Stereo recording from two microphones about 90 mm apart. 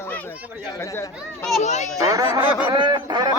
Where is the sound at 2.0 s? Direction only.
40° right (ahead or behind).